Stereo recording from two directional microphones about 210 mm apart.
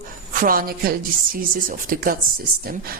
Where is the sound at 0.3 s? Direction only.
45° right (ahead or behind).